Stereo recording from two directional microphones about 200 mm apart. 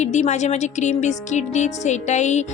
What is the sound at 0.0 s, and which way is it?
Speech, 35° left (ahead or behind).